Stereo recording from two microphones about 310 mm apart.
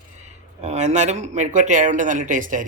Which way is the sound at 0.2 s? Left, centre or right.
Right.